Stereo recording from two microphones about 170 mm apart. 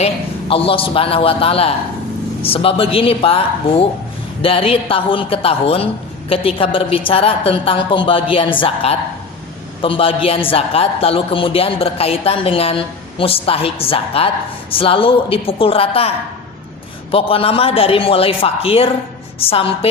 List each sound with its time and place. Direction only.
0.0 s a woman's voice: 35° left (ahead or behind)